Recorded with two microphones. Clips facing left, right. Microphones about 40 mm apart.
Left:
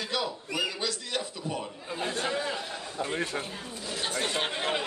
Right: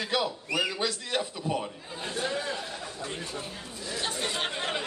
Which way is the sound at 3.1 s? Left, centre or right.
Left.